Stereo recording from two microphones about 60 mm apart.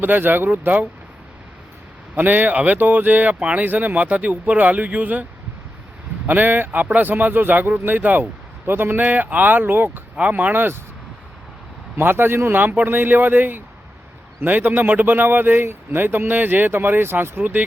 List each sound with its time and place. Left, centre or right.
0.0 s a man's voice: right
2.1 s speech: right
6.2 s a man's voice: right
9.0 s a man's voice: right
10.2 s speech: right
11.9 s a man's voice: right